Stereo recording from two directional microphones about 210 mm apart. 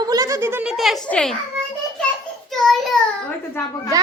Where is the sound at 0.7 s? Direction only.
Centre (ahead or behind).